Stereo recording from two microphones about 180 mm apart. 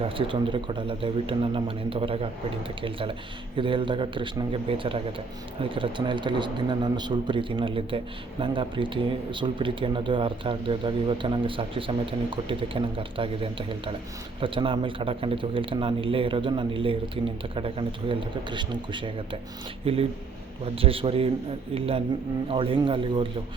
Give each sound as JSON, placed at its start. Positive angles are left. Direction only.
{"t": 0.0, "sound": "a man's voice", "side_deg": -30}